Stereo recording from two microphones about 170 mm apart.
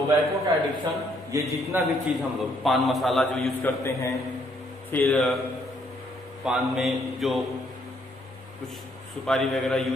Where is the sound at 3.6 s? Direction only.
15° left (ahead or behind).